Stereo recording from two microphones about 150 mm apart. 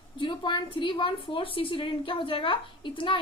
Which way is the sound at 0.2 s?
30° left (ahead or behind).